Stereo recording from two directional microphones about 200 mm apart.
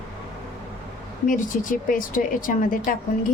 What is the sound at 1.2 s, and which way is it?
Speech, 40° left (ahead or behind).